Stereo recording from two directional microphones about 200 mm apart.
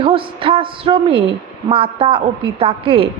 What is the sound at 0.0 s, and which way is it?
A woman's voice, 25° right (ahead or behind).